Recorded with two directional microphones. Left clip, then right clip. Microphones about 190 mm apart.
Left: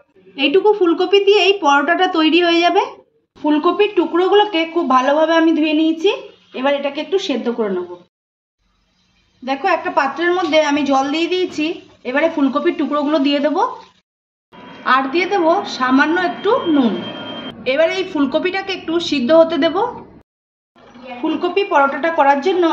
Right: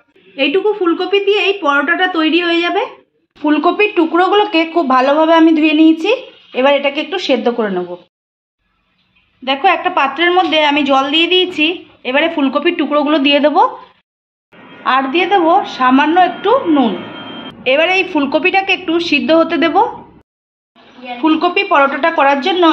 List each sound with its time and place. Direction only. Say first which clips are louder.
0.4 s a woman's voice: even; 20° left (ahead or behind)
3.4 s speech: right 3 dB; 40° right (ahead or behind)
9.4 s a woman's voice: right 5 dB; 25° right (ahead or behind)
14.9 s a woman's voice: right 3 dB; 30° right (ahead or behind)
17.6 s speech: right 4 dB; 35° right (ahead or behind)
21.4 s speech: right 2 dB; 40° right (ahead or behind)